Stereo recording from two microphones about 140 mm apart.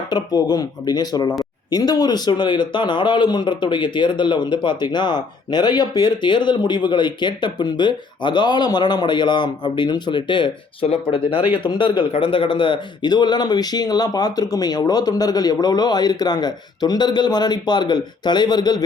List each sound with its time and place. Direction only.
0.1 s a man's voice: 30° left (ahead or behind)